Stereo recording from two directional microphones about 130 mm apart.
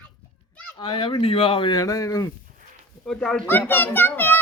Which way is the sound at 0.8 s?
40° left (ahead or behind).